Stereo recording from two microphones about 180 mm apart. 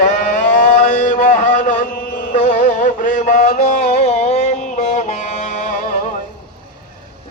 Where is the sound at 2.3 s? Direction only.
40° left (ahead or behind).